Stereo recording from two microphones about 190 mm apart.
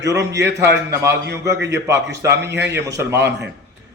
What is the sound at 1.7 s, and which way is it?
A man's voice, 65° right (ahead or behind).